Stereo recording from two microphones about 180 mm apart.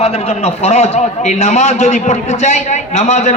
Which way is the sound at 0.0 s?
35° left (ahead or behind).